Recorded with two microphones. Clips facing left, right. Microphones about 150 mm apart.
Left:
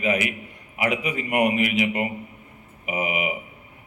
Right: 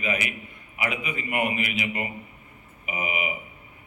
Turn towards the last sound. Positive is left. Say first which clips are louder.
# left 4 dB
turn(degrees=75)  # may be behind; listen again after turning